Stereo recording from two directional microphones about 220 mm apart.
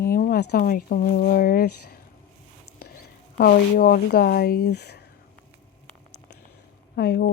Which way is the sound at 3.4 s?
45° left (ahead or behind).